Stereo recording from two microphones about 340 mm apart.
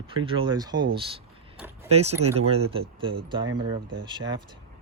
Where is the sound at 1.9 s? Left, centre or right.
Centre.